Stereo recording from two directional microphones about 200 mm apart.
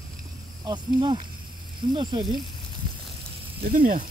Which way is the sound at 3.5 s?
45° right (ahead or behind).